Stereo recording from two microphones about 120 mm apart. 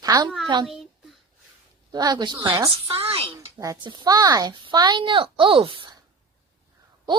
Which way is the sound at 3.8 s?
40° right (ahead or behind).